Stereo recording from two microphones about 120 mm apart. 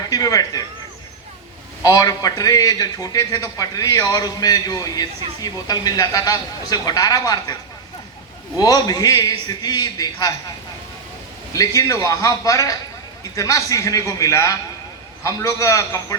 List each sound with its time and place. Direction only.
0.1 s a man's voice: 30° left (ahead or behind)
1.8 s a man's voice: 30° left (ahead or behind)
8.5 s a man's voice: 30° left (ahead or behind)
11.5 s a man's voice: 30° left (ahead or behind)